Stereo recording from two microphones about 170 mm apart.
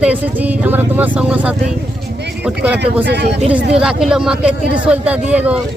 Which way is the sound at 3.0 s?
80° right.